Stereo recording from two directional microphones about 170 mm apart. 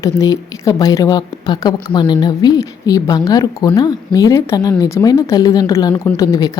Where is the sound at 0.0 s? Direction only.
20° left (ahead or behind).